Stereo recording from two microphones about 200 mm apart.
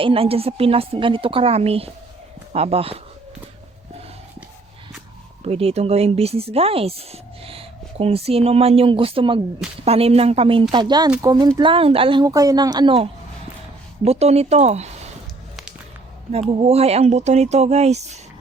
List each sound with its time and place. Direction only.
0.0 s speech: 30° right (ahead or behind)
5.4 s speech: 30° right (ahead or behind)
16.3 s speech: 30° right (ahead or behind)